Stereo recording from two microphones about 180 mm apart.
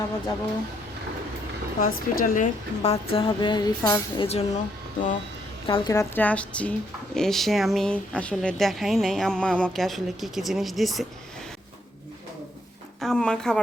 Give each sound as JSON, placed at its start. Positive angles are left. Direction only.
{"t": 1.8, "sound": "a woman's voice", "side_deg": 50}
{"t": 5.6, "sound": "speech", "side_deg": 25}
{"t": 13.0, "sound": "speech", "side_deg": 5}